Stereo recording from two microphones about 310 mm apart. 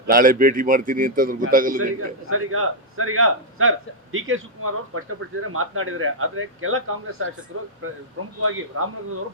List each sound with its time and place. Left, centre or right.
0.1 s a man's voice: right
2.3 s a man's voice: right